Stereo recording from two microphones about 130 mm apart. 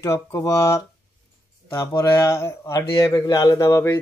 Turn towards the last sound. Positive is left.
turn(degrees=25)  # may be behind; listen again after turning